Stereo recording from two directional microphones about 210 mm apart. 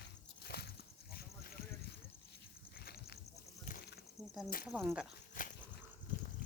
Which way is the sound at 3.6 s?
40° left (ahead or behind).